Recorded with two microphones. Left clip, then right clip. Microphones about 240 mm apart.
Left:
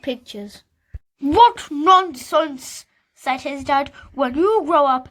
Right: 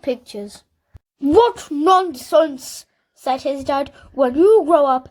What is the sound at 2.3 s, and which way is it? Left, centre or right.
Speech, centre.